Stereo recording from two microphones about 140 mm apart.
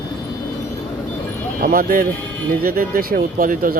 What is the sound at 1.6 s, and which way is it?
Speech, 90° right.